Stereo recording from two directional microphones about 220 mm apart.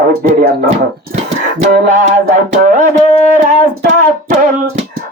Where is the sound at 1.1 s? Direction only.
30° right (ahead or behind).